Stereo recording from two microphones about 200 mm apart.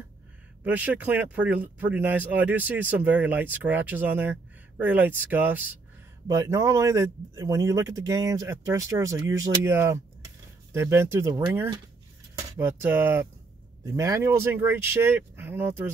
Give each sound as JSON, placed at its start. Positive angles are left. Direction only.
{"t": 0.7, "sound": "speech", "side_deg": -5}